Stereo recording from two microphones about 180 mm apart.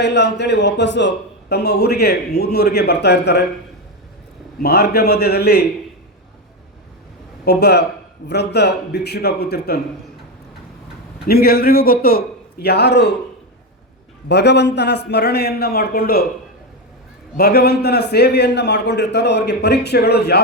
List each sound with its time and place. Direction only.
0.0 s a man's voice: 70° left (ahead or behind)
4.6 s a man's voice: 60° left (ahead or behind)
7.4 s a man's voice: 65° left (ahead or behind)
11.3 s a man's voice: 55° left (ahead or behind)
14.3 s a man's voice: 70° left (ahead or behind)
17.3 s a man's voice: 55° left (ahead or behind)